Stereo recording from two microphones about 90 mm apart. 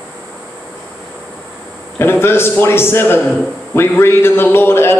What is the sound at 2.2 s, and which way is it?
A man's voice, 25° left (ahead or behind).